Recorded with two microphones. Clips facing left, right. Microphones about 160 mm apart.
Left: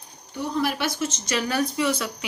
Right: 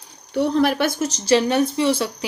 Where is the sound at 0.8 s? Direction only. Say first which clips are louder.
Right 5 dB; 40° right (ahead or behind).